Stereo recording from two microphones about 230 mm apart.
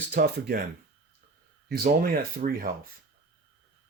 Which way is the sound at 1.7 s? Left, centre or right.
Right.